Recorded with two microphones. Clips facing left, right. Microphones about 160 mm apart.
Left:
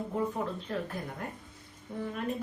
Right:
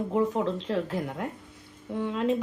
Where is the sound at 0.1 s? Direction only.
80° right.